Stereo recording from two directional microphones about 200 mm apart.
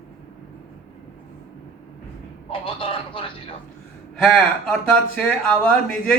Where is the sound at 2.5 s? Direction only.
25° left (ahead or behind).